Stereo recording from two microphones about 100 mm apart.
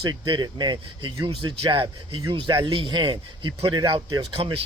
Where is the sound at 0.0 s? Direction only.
50° right (ahead or behind).